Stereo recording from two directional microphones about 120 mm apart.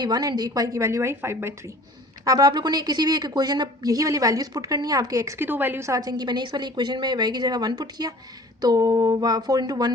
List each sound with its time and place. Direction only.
0.0 s a woman's voice: 35° right (ahead or behind)
2.2 s a woman's voice: 30° right (ahead or behind)